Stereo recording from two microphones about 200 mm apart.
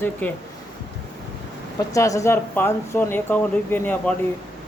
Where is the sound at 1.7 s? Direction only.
15° left (ahead or behind).